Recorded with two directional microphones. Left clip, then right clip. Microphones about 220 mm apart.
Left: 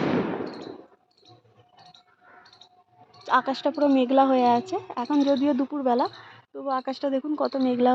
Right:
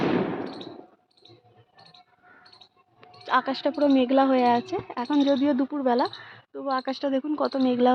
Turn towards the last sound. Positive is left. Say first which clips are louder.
# even
turn(degrees=0)  # may be behind; listen again after turning